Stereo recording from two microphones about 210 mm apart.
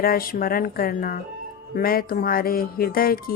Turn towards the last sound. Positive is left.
turn(degrees=45)  # may be behind; listen again after turning